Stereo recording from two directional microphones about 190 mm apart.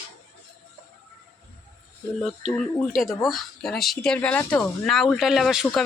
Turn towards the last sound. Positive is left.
turn(degrees=0)  # may be behind; listen again after turning